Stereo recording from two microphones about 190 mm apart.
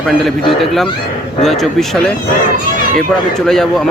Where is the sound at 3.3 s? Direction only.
Centre (ahead or behind).